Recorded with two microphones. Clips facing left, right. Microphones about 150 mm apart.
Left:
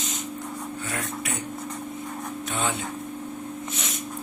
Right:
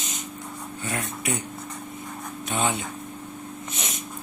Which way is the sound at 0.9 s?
20° right (ahead or behind).